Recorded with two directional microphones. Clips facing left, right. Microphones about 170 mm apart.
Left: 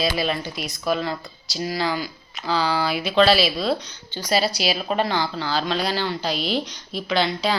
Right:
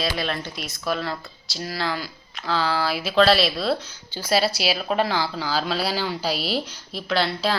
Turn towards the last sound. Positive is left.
turn(degrees=0)  # may be behind; listen again after turning